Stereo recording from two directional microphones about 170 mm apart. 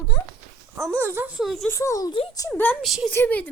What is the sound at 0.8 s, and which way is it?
Speech, 15° right (ahead or behind).